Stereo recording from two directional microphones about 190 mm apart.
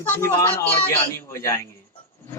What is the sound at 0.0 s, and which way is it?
Speech, 15° left (ahead or behind).